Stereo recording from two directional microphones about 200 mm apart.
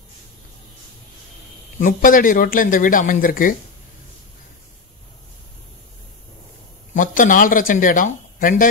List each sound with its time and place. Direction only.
1.8 s a man's voice: 40° left (ahead or behind)
6.9 s speech: 40° left (ahead or behind)